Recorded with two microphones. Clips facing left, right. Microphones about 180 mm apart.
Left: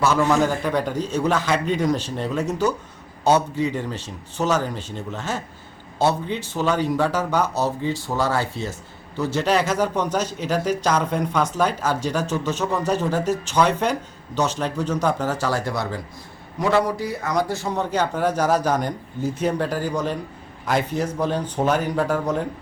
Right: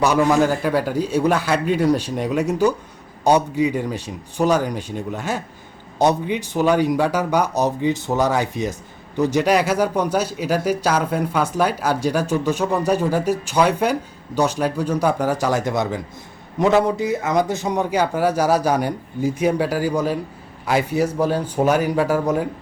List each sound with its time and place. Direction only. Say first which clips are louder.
0.0 s a man's voice: right 3 dB; 15° right (ahead or behind)